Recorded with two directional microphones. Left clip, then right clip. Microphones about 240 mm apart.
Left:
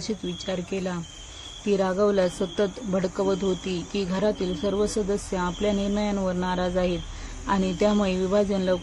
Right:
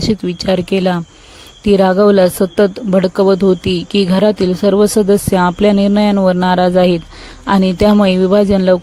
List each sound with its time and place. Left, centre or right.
0.0 s speech: right